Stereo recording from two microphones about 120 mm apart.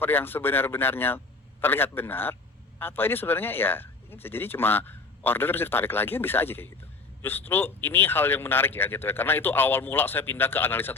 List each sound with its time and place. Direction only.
0.0 s speech: 15° left (ahead or behind)